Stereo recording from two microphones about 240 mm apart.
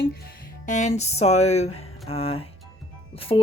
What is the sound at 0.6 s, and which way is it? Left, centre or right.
A woman's voice, left.